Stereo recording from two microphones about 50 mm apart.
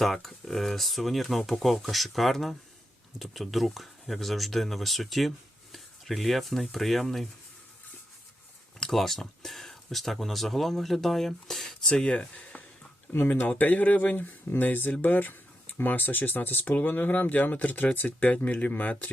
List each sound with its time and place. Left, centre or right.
0.0 s speech: centre
8.9 s speech: centre; by 18.9 s left